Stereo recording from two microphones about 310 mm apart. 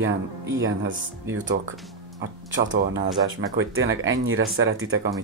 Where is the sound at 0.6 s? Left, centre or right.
Right.